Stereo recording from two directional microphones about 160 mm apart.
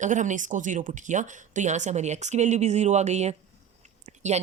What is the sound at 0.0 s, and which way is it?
A woman's voice, 50° right (ahead or behind).